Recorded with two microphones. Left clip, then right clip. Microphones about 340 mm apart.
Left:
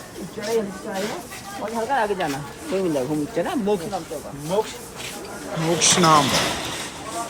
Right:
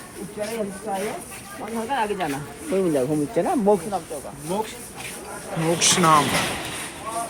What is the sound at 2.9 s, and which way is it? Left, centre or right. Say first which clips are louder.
Speech: right 2 dB; centre.